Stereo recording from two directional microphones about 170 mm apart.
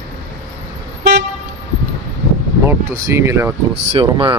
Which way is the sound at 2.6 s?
15° right (ahead or behind).